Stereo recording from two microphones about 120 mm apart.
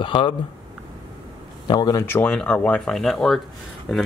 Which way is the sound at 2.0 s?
20° left (ahead or behind).